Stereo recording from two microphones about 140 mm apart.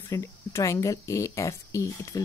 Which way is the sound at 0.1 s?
20° left (ahead or behind).